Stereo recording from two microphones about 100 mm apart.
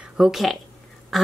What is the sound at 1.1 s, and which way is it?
Duck, centre (ahead or behind).